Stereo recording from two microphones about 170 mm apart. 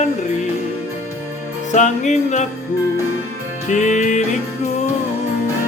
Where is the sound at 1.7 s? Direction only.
45° left (ahead or behind).